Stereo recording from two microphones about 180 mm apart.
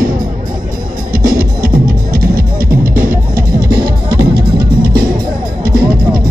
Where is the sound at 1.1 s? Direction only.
55° right (ahead or behind).